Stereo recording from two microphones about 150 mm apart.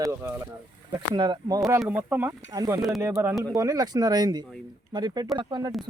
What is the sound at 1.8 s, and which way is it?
Speech, 10° right (ahead or behind).